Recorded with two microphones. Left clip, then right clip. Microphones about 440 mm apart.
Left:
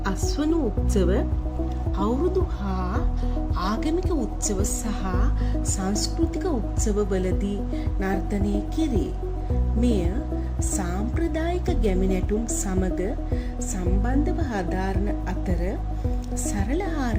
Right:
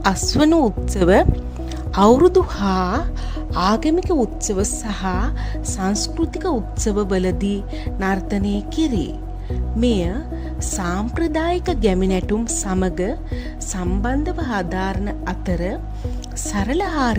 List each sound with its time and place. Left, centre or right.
0.0 s speech: right
2.0 s speech: right